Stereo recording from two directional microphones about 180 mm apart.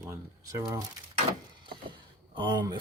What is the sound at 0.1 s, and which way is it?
Speech, 15° right (ahead or behind).